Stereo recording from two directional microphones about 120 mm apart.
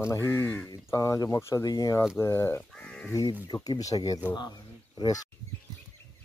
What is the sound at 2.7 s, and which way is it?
Speech, 10° left (ahead or behind).